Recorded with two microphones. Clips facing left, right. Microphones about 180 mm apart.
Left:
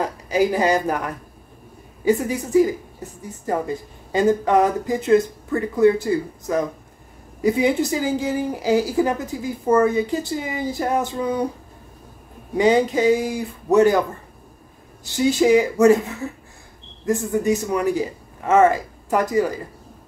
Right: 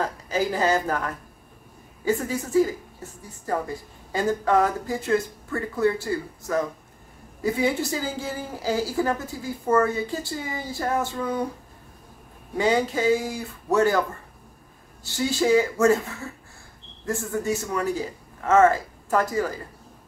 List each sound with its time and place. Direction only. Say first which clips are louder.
0.0 s a woman's voice: left 5 dB; 15° left (ahead or behind)
12.5 s a woman's voice: left 5 dB; 20° left (ahead or behind)
15.0 s a woman's voice: left 5 dB; 20° left (ahead or behind)